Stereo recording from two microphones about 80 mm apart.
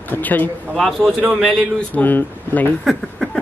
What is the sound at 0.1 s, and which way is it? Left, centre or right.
Speech, left.